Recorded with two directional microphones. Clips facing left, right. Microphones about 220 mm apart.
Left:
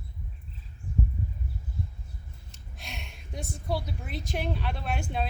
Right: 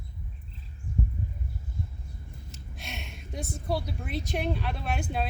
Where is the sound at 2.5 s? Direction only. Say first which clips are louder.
Right 2 dB; centre (ahead or behind).